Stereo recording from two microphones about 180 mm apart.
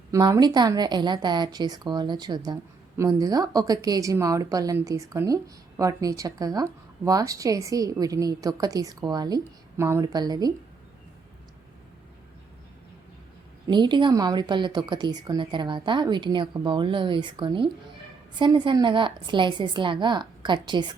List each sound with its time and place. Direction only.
0.1 s a woman's voice: 20° right (ahead or behind)
13.7 s a woman's voice: 25° right (ahead or behind)